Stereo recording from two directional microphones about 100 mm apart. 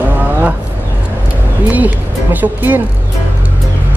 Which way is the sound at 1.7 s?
15° right (ahead or behind).